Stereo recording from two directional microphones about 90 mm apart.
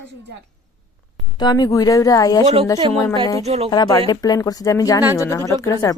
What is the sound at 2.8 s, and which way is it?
Speech, 65° right (ahead or behind).